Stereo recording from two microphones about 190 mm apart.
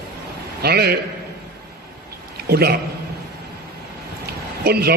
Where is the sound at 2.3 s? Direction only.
55° right (ahead or behind).